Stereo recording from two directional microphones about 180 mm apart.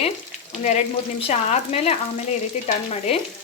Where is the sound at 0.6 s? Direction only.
35° left (ahead or behind).